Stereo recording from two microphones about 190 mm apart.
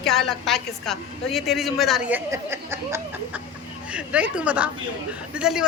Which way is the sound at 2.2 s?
15° right (ahead or behind).